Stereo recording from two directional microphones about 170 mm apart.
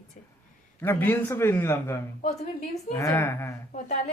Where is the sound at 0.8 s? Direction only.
15° left (ahead or behind).